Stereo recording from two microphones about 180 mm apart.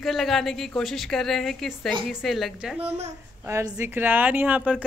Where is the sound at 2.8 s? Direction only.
35° right (ahead or behind).